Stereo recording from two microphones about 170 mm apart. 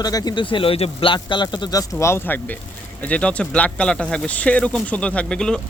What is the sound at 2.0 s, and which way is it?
Speech, 15° left (ahead or behind).